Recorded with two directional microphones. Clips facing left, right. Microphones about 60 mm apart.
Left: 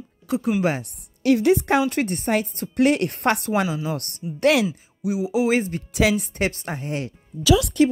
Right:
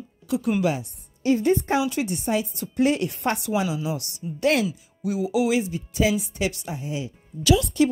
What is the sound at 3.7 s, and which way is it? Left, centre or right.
Speech, left.